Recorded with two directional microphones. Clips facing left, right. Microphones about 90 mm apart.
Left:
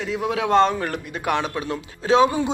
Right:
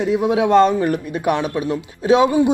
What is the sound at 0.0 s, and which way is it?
A man's voice, 20° right (ahead or behind).